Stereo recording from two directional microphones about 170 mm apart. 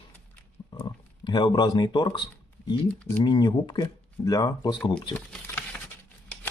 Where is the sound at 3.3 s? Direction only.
25° left (ahead or behind).